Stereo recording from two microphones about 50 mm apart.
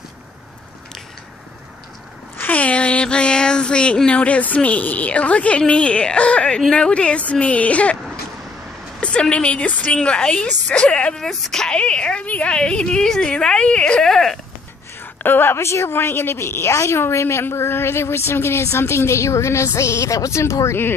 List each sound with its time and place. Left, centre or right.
2.3 s a sound: left
2.6 s a sound: left
4.6 s a woman's voice: left
9.0 s a woman's voice: left
11.1 s speech: centre
11.6 s a woman's voice: centre
14.0 s speech: centre
15.2 s a woman's voice: left
15.5 s a woman's voice: left
15.9 s a woman's voice: left